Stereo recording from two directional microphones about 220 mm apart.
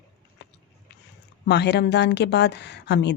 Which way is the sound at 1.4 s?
50° left (ahead or behind).